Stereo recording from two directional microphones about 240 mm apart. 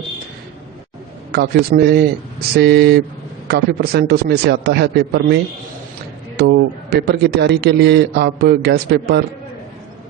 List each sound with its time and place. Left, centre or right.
1.3 s a man's voice: right